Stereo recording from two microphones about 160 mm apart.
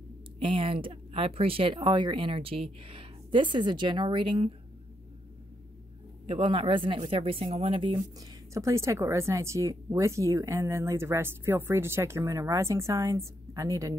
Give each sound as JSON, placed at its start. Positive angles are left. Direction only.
{"t": 0.4, "sound": "speech", "side_deg": -35}
{"t": 6.2, "sound": "speech", "side_deg": -35}
{"t": 8.2, "sound": "a woman's voice", "side_deg": -20}